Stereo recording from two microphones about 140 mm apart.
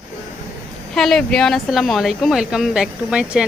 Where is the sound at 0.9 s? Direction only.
Centre (ahead or behind).